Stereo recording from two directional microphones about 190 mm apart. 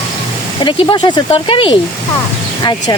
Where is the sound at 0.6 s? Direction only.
25° left (ahead or behind).